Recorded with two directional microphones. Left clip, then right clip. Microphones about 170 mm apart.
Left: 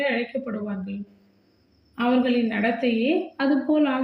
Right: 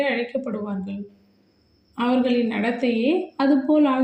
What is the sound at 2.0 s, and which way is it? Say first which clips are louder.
Speech: right 1 dB; 30° right (ahead or behind).